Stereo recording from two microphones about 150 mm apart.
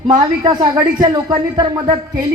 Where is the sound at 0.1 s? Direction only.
25° right (ahead or behind).